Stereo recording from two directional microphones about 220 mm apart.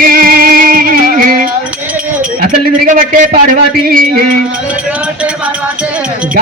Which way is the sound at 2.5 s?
35° right (ahead or behind).